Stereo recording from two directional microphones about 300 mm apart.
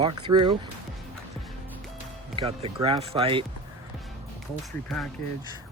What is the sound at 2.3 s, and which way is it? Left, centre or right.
Speech, centre.